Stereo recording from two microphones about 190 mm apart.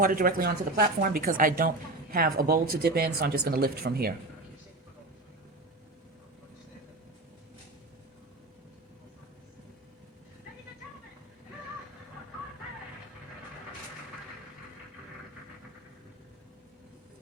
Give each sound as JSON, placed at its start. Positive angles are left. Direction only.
{"t": 0.0, "sound": "speech", "side_deg": -50}